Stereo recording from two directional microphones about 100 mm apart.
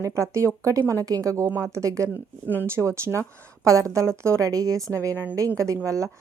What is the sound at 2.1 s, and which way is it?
A woman's voice, 20° right (ahead or behind).